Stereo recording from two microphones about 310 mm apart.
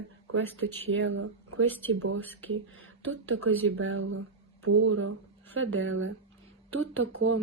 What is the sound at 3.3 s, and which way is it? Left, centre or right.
Speech, right.